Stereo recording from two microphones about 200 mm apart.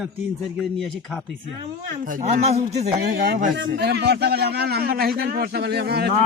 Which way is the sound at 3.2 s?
50° right (ahead or behind).